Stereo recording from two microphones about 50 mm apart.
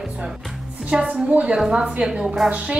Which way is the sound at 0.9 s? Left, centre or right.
Centre.